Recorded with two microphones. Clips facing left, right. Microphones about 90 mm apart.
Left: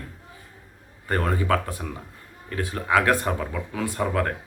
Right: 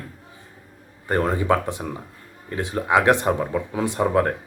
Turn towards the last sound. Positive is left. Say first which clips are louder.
# right 5 dB
turn(degrees=-25)  # may be behind; listen again after turning